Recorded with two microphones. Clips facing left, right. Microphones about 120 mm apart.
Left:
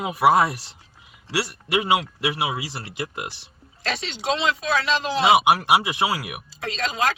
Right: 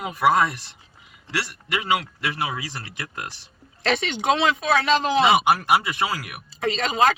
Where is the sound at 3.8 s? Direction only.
55° right (ahead or behind).